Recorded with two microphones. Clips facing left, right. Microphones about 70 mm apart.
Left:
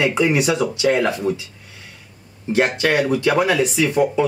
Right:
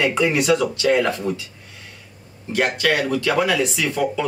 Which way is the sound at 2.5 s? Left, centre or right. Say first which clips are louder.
Left 2 dB; left.